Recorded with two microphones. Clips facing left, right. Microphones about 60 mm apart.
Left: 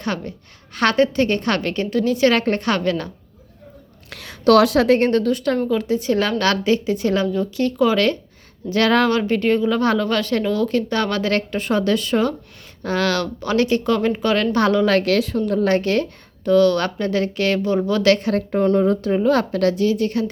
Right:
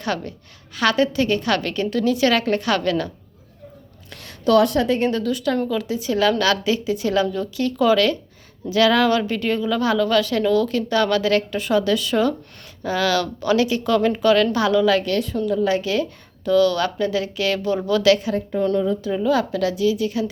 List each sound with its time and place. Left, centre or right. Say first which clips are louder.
0.0 s a woman's voice: even; left
0.7 s a woman's voice: left 2 dB; left
4.1 s a woman's voice: left 3 dB; left
5.1 s a woman's voice: left 3 dB; left
15.0 s a woman's voice: left 4 dB; left
15.4 s a woman's voice: left 1 dB; left